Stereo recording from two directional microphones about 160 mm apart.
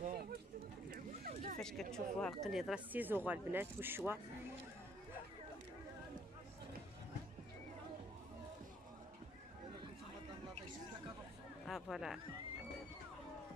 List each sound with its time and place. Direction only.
0.0 s a sound: 70° right (ahead or behind)
1.6 s speech: 5° left (ahead or behind); by 4.2 s 15° right (ahead or behind)
11.6 s speech: centre (ahead or behind)